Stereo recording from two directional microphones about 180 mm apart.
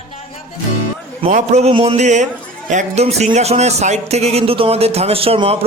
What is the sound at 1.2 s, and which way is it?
Speech, 40° right (ahead or behind).